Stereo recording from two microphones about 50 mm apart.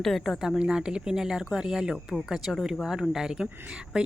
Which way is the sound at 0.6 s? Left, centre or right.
Centre.